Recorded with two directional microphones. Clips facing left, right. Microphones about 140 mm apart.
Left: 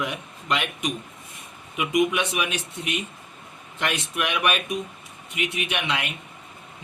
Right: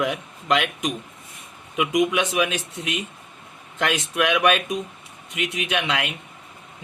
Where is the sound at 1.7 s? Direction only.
90° right.